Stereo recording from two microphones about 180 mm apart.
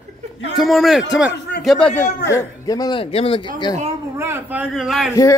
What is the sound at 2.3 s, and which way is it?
Speech, 20° left (ahead or behind).